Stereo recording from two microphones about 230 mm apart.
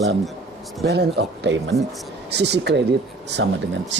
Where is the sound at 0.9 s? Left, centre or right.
Right.